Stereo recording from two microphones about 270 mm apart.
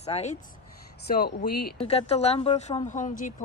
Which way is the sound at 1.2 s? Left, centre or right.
Left.